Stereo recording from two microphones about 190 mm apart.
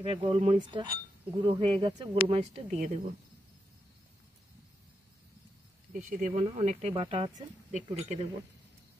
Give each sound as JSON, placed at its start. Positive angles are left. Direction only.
{"t": 0.0, "sound": "speech", "side_deg": -30}
{"t": 5.9, "sound": "speech", "side_deg": -40}
{"t": 7.7, "sound": "speech", "side_deg": -35}